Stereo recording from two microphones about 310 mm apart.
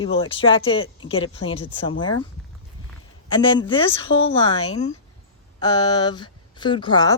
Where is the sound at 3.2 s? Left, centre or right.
Centre.